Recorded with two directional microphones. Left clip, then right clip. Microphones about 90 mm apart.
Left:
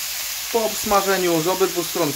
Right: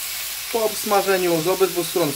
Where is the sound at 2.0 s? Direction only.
20° left (ahead or behind).